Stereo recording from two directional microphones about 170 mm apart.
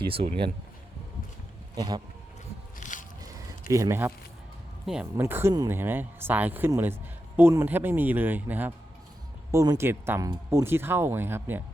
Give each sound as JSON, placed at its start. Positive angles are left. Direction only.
{"t": 0.1, "sound": "speech", "side_deg": -30}
{"t": 1.7, "sound": "speech", "side_deg": -25}
{"t": 2.8, "sound": "a sound", "side_deg": 45}
{"t": 3.7, "sound": "speech", "side_deg": -15}
{"t": 4.9, "sound": "speech", "side_deg": -5}